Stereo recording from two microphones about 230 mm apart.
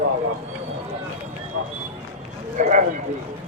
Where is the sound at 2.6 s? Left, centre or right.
Right.